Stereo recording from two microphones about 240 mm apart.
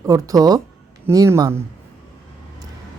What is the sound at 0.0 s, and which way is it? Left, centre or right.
Speech, centre.